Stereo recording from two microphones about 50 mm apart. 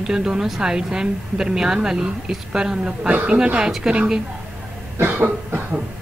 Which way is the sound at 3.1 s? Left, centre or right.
Right.